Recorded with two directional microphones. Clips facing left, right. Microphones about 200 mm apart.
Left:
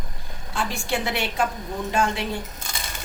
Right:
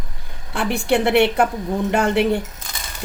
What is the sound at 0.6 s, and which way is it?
A woman's voice, 60° right (ahead or behind).